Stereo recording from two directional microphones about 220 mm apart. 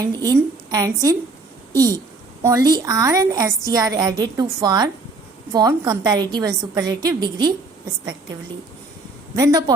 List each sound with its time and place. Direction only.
0.0 s a woman's voice: 15° right (ahead or behind)
9.3 s a woman's voice: 15° right (ahead or behind)